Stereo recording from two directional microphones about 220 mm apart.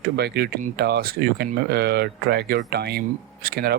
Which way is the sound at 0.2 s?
45° right (ahead or behind).